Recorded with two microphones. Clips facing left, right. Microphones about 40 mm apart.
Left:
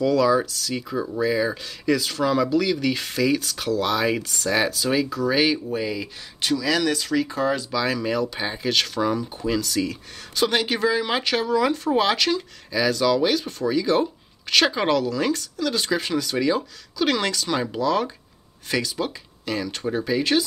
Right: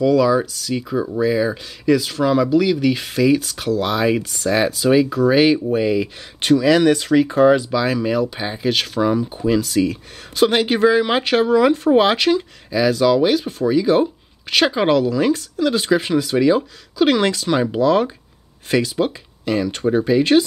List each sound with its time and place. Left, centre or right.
0.0 s speech: centre
6.4 s speech: right
7.7 s speech: centre